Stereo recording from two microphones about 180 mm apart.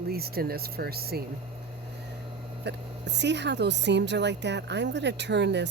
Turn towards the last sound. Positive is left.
turn(degrees=-75)  # may be behind; listen again after turning